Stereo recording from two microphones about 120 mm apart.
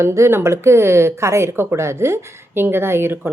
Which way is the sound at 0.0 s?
25° right (ahead or behind).